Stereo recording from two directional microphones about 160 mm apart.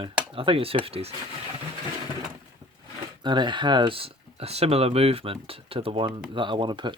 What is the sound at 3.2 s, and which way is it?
Speech, 30° right (ahead or behind).